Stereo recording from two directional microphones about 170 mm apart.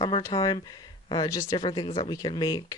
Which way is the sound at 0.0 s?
25° left (ahead or behind).